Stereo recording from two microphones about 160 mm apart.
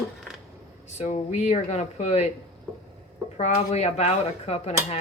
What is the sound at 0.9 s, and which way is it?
Speech, 45° left (ahead or behind).